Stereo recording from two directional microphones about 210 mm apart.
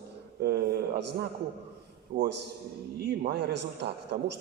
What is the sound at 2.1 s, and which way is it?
A man's voice, 55° right (ahead or behind).